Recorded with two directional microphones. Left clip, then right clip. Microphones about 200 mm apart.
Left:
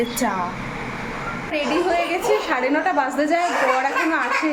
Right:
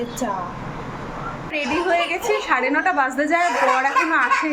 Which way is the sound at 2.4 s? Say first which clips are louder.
Right 1 dB; 5° right (ahead or behind).